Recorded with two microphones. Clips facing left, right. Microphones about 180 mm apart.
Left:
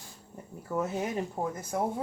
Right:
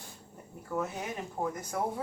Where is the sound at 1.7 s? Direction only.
25° left (ahead or behind).